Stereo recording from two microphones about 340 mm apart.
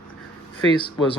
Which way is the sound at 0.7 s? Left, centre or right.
Centre.